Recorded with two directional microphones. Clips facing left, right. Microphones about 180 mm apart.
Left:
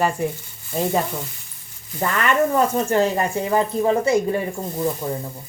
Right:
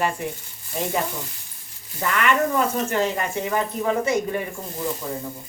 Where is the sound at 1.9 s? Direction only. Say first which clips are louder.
Left 2 dB; 35° left (ahead or behind).